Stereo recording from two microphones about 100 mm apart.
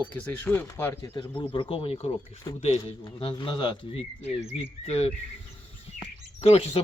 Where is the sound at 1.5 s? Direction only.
65° left (ahead or behind); by 2.1 s 80° left.